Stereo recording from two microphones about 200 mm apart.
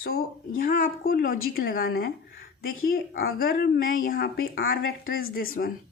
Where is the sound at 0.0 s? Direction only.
90° left.